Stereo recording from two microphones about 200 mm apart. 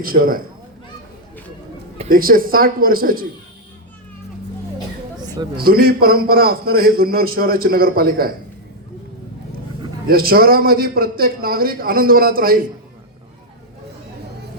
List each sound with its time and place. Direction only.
0.0 s a man's voice: 45° right (ahead or behind)
2.0 s a man's voice: 45° right (ahead or behind)
5.2 s a sound: 20° right (ahead or behind)
5.5 s a man's voice: 50° right (ahead or behind)
10.1 s a man's voice: 50° right (ahead or behind)